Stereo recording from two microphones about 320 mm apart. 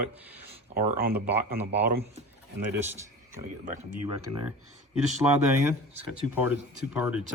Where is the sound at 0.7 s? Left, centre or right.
Right.